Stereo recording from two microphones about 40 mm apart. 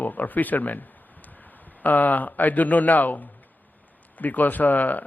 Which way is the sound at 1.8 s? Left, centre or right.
Left.